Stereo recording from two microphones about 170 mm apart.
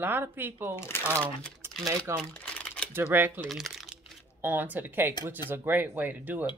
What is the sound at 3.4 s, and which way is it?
Speech, centre (ahead or behind).